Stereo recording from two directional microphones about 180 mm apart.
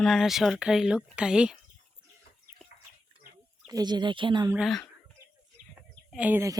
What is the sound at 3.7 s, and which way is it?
Speech, 20° right (ahead or behind).